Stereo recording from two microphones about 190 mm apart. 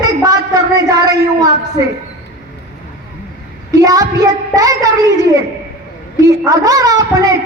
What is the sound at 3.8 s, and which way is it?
A man's voice, 20° right (ahead or behind).